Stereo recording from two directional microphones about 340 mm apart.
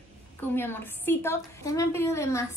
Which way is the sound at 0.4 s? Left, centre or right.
Centre.